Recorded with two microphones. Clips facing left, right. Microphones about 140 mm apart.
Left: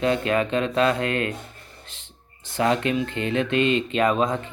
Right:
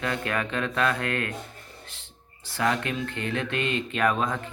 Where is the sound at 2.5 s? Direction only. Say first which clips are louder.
Left 5 dB; 20° left (ahead or behind).